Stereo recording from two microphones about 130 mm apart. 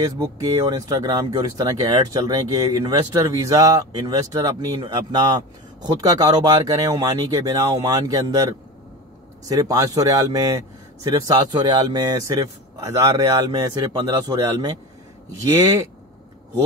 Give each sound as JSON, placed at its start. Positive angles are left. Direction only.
{"t": 0.0, "sound": "speech", "side_deg": -25}
{"t": 9.5, "sound": "speech", "side_deg": -25}
{"t": 11.2, "sound": "speech", "side_deg": -30}